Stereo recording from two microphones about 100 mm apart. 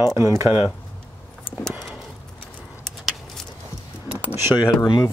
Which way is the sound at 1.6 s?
Centre (ahead or behind).